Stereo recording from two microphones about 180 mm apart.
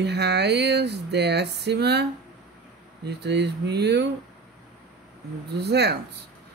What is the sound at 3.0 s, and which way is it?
Speech, 70° right (ahead or behind).